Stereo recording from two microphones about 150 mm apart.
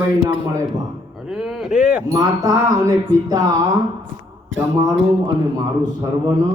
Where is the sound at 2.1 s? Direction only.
25° right (ahead or behind).